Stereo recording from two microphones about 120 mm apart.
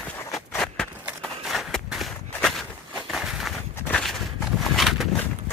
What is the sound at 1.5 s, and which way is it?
Walk, centre (ahead or behind).